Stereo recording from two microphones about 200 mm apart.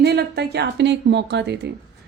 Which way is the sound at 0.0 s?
55° right (ahead or behind).